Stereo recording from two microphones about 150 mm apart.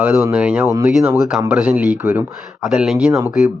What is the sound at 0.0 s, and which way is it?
Speech, 15° right (ahead or behind).